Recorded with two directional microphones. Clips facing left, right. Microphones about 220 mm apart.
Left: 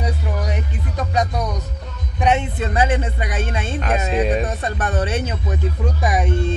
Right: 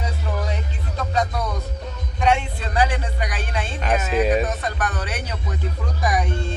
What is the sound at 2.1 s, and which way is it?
Speech, 20° left (ahead or behind).